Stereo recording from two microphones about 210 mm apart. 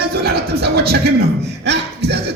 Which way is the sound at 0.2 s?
50° right (ahead or behind).